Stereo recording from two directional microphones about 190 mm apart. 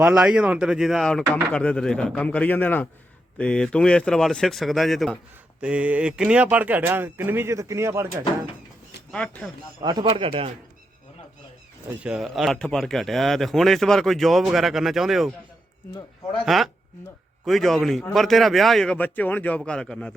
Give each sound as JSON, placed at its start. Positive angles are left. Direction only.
{"t": 0.0, "sound": "speech", "side_deg": -5}
{"t": 9.1, "sound": "speech", "side_deg": 5}
{"t": 9.8, "sound": "speech", "side_deg": -25}
{"t": 12.0, "sound": "speech", "side_deg": 0}
{"t": 16.5, "sound": "speech", "side_deg": 0}